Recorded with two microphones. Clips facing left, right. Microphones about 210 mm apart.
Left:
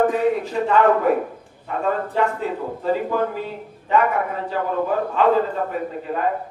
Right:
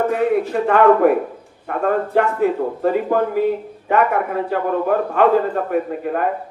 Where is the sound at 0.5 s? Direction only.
60° right (ahead or behind).